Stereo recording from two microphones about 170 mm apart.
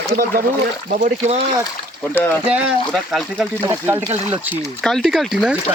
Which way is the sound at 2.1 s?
10° left (ahead or behind).